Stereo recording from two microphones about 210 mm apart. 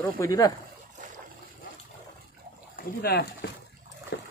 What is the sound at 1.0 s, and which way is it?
Boat, 40° right (ahead or behind).